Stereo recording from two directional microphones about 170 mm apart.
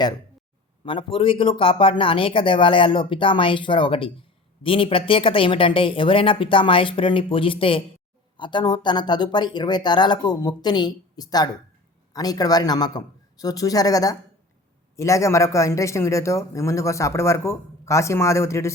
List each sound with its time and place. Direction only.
0.9 s speech: 30° left (ahead or behind)